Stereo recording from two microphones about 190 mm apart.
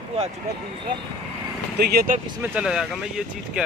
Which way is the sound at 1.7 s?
50° right (ahead or behind).